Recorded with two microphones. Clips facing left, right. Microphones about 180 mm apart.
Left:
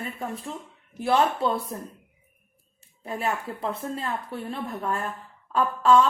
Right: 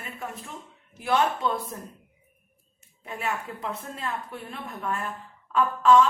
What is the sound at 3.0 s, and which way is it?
Speech, 35° left (ahead or behind).